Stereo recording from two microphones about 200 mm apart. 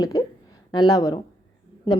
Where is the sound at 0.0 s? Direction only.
15° left (ahead or behind).